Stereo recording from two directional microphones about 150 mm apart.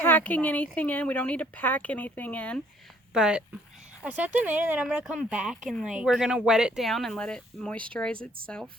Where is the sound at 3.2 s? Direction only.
5° right (ahead or behind).